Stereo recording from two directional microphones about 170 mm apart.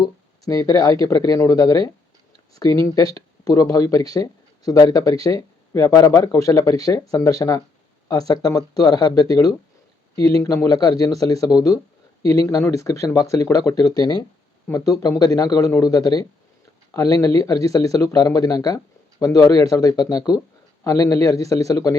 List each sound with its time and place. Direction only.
0.0 s speech: 20° left (ahead or behind)